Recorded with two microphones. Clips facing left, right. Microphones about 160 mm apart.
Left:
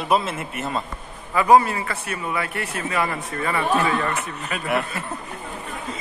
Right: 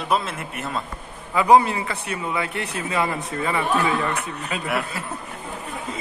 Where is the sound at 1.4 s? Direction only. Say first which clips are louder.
Even; 15° right (ahead or behind).